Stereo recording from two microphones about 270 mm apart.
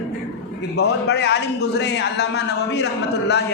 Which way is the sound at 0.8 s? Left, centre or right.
Left.